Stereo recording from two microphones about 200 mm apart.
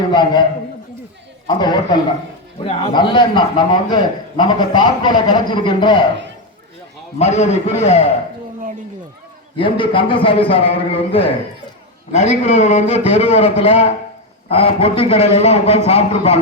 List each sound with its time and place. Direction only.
0.1 s a man's voice: 20° left (ahead or behind)
1.5 s a man's voice: 20° left (ahead or behind)
7.2 s a man's voice: 35° left (ahead or behind)
9.6 s a man's voice: 25° left (ahead or behind)